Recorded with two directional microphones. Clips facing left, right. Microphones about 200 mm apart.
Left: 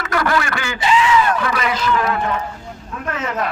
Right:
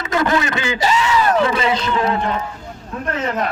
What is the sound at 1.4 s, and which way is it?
Speech, 25° right (ahead or behind).